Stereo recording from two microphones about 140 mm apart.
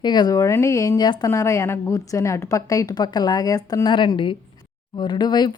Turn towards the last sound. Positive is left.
turn(degrees=30)  # may be behind; listen again after turning